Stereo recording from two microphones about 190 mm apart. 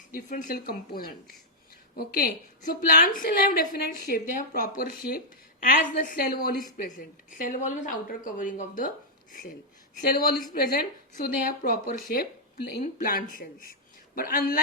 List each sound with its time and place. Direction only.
0.1 s speech: 45° left (ahead or behind)
6.3 s speech: 50° left (ahead or behind)